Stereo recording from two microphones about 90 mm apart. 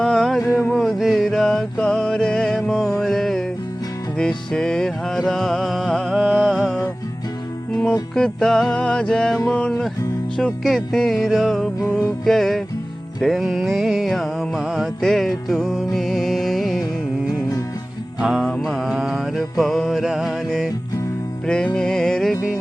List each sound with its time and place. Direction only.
0.0 s a sound: 5° left (ahead or behind)
0.7 s music: centre (ahead or behind)
8.1 s music: 5° left (ahead or behind)
18.2 s music: 5° right (ahead or behind)
21.4 s music: 10° left (ahead or behind)